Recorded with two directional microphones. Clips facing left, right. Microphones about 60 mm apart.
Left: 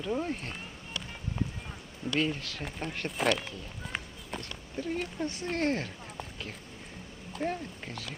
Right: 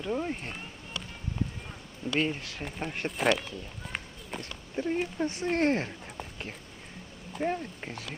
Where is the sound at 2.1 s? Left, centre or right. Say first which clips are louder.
Right 1 dB; right.